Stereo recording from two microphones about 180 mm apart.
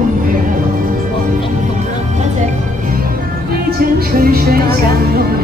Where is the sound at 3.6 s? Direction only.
55° right (ahead or behind).